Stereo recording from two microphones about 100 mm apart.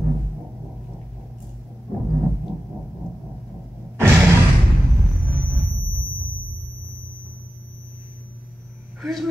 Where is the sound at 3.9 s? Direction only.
25° right (ahead or behind).